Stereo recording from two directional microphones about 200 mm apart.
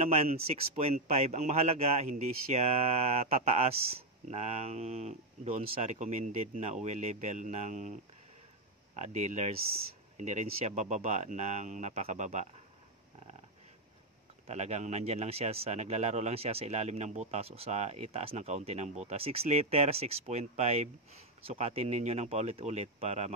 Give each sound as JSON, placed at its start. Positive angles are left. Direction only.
{"t": 0.0, "sound": "speech", "side_deg": -30}
{"t": 14.4, "sound": "speech", "side_deg": -35}